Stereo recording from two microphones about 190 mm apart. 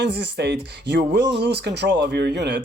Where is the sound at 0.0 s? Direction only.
65° right (ahead or behind).